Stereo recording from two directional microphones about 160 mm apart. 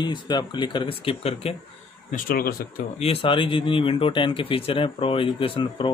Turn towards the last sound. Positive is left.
turn(degrees=30)  # may be behind; listen again after turning